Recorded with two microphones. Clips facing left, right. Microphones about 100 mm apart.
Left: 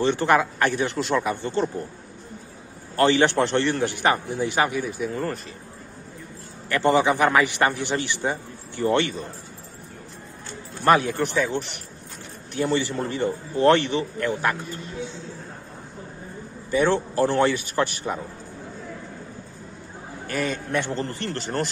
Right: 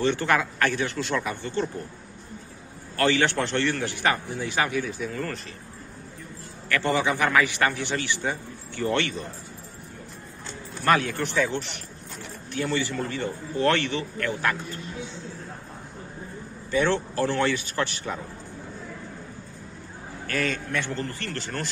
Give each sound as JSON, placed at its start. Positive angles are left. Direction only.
{"t": 0.0, "sound": "a man's voice", "side_deg": 20}
{"t": 3.0, "sound": "a man's voice", "side_deg": 20}
{"t": 6.7, "sound": "a man's voice", "side_deg": 25}
{"t": 10.9, "sound": "a man's voice", "side_deg": 20}
{"t": 16.7, "sound": "a man's voice", "side_deg": 15}
{"t": 20.2, "sound": "a man's voice", "side_deg": 20}